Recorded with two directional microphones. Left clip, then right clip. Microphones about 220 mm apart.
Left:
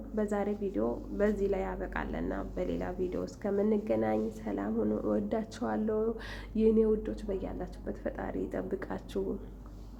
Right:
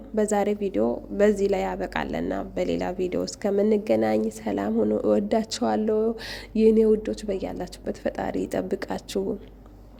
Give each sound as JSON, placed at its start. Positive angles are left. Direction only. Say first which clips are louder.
{"t": 0.2, "sound": "a woman's voice", "louder": "right 9 dB", "side_deg": -35}